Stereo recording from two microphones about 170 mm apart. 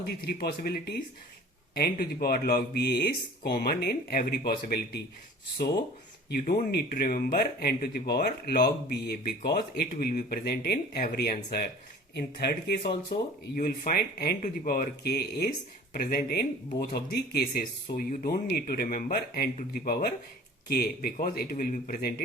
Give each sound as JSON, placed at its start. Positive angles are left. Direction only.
{"t": 0.0, "sound": "speech", "side_deg": 65}
{"t": 6.3, "sound": "speech", "side_deg": 55}
{"t": 12.1, "sound": "speech", "side_deg": 70}
{"t": 15.9, "sound": "speech", "side_deg": 60}
{"t": 17.1, "sound": "speech", "side_deg": 65}
{"t": 20.7, "sound": "speech", "side_deg": 70}